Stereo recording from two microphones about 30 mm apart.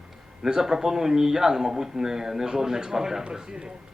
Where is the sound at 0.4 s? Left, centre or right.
Centre.